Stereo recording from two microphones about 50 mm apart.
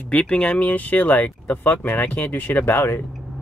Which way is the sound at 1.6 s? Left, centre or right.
Left.